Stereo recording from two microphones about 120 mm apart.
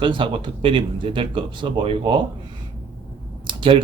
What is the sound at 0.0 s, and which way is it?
Speech, 45° right (ahead or behind).